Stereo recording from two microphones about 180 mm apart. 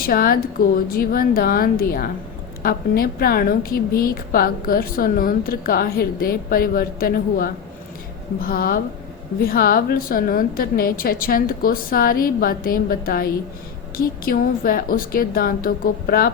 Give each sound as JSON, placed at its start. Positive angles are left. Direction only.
{"t": 0.0, "sound": "a woman's voice", "side_deg": 55}